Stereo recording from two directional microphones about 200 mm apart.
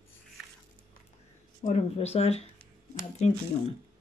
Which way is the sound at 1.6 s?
35° left (ahead or behind).